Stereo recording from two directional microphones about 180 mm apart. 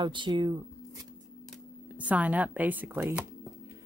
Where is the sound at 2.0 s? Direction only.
10° right (ahead or behind).